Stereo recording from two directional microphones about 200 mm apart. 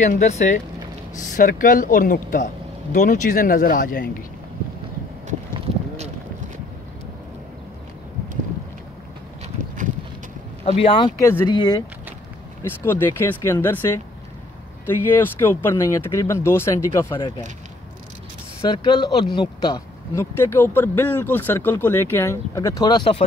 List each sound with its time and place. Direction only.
0.0 s speech: 35° left (ahead or behind)
5.5 s a sound: 35° right (ahead or behind)
10.6 s speech: 30° left (ahead or behind)
11.2 s speech: 15° left (ahead or behind)
15.0 s speech: 10° left (ahead or behind)
18.6 s speech: 25° left (ahead or behind)